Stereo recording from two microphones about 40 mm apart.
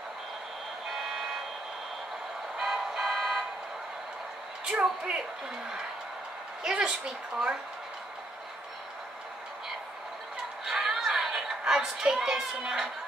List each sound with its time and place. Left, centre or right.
1.0 s vehicle: centre
2.5 s vehicle: centre
4.6 s speech: right
6.6 s a child's voice: centre
10.6 s a sound: centre
12.1 s a child's voice: centre